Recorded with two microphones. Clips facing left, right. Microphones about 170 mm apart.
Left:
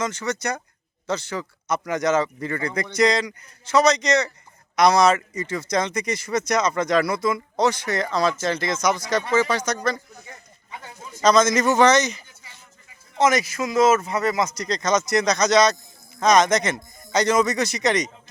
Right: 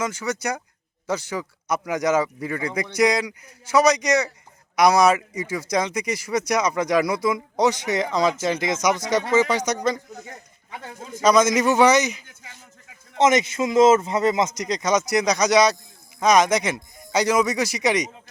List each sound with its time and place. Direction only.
0.0 s speech: 10° right (ahead or behind)
10.8 s a man's voice: 50° right (ahead or behind)
11.2 s speech: 10° right (ahead or behind)
13.1 s speech: 25° right (ahead or behind)